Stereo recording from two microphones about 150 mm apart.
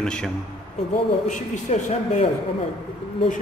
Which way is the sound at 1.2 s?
55° left (ahead or behind).